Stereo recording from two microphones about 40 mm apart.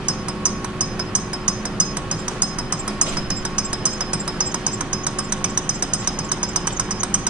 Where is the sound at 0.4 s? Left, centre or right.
Right.